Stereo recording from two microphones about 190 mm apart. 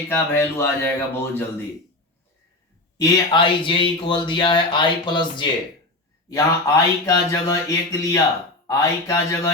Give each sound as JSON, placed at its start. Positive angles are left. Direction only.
{"t": 0.1, "sound": "speech", "side_deg": 15}
{"t": 3.0, "sound": "speech", "side_deg": 25}